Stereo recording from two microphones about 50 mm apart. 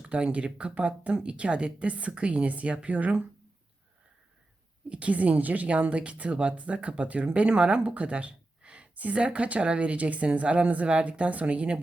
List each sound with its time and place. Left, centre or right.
0.0 s speech: right
4.9 s speech: right